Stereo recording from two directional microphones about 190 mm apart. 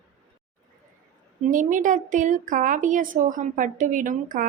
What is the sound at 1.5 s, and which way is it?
Speech, 45° right (ahead or behind).